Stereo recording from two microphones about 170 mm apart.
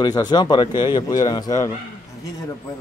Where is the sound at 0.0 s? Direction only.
25° left (ahead or behind).